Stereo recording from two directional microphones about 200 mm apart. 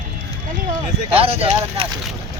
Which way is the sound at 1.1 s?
30° right (ahead or behind).